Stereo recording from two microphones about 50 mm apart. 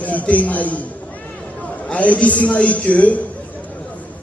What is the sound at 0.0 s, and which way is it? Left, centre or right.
Speech, left.